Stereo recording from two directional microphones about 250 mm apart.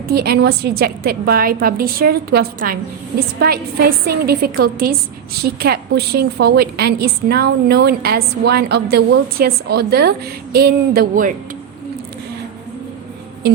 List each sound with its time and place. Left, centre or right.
0.1 s a woman's voice: right